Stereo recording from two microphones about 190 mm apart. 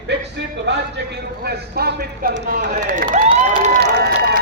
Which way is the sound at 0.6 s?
65° right (ahead or behind).